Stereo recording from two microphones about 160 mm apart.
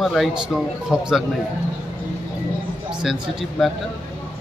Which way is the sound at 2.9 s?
5° right (ahead or behind).